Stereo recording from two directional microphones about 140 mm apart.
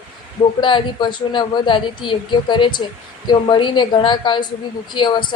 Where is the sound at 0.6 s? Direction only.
35° left (ahead or behind).